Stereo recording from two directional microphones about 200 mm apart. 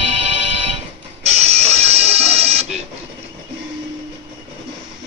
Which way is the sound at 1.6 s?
30° right (ahead or behind).